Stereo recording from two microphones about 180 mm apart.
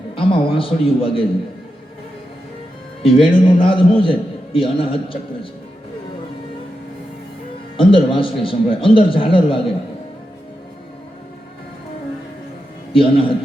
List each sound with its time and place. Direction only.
0.2 s a man's voice: 30° left (ahead or behind)
3.0 s a man's voice: 30° left (ahead or behind)
7.8 s a man's voice: 30° left (ahead or behind)
12.9 s a man's voice: 30° left (ahead or behind)